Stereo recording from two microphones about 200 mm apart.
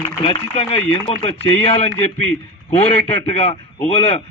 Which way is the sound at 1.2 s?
30° left (ahead or behind).